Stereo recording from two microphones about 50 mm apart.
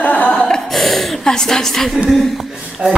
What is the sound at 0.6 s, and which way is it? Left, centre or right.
A woman's voice, centre.